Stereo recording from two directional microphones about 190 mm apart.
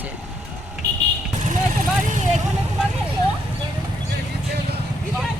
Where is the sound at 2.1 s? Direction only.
40° right (ahead or behind).